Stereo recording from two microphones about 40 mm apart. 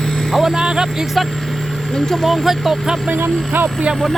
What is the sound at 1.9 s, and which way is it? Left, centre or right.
Speech, centre.